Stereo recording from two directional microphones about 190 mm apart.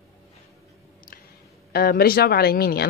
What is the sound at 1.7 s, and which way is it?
Speech, 55° left (ahead or behind).